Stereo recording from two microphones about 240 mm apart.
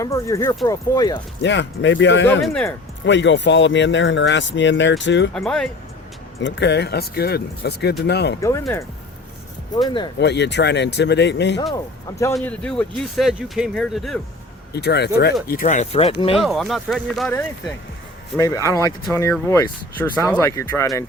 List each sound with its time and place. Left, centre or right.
0.0 s speech: centre
1.4 s speech: left
2.4 s speech: centre
3.1 s speech: left
5.3 s speech: centre
6.4 s speech: left
8.4 s speech: centre
10.2 s speech: left
11.7 s speech: centre
12.3 s speech: centre
14.7 s speech: left
16.3 s speech: centre
18.3 s speech: centre